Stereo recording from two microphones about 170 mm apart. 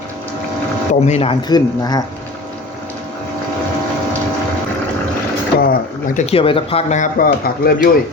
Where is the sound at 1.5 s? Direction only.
25° left (ahead or behind).